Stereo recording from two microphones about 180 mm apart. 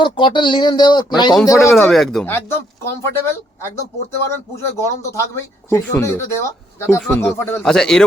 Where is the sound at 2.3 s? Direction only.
15° left (ahead or behind).